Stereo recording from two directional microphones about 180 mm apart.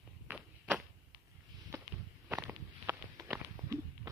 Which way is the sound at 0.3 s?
Centre (ahead or behind).